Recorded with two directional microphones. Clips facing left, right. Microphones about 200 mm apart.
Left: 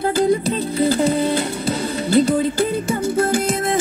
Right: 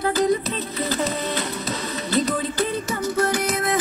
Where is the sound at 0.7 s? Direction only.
30° left (ahead or behind).